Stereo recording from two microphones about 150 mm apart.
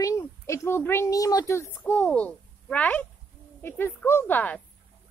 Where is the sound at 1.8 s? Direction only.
10° left (ahead or behind).